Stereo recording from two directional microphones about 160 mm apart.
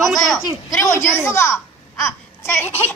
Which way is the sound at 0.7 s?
20° left (ahead or behind).